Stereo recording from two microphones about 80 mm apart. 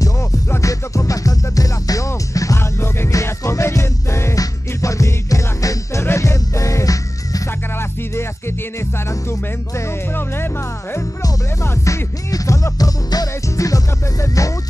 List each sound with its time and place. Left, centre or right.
0.5 s music: left
7.7 s music: left
11.6 s music: left